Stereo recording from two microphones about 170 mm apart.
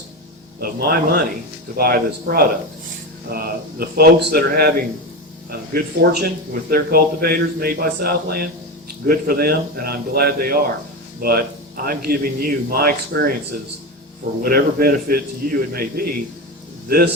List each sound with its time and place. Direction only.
0.6 s speech: 60° right (ahead or behind)